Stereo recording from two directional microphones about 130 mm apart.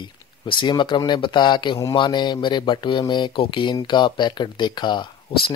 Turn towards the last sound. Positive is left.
turn(degrees=45)  # may be behind; listen again after turning